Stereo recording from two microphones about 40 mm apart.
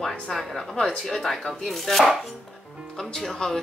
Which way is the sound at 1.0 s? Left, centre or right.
Centre.